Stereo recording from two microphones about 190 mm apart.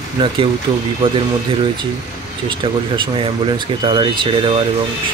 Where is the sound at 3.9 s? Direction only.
25° right (ahead or behind).